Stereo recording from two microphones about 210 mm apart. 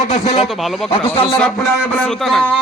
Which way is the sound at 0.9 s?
25° left (ahead or behind).